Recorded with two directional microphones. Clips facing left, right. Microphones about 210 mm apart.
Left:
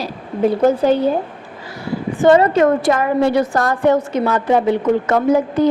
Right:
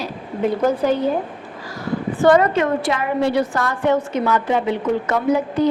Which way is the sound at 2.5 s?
45° left (ahead or behind).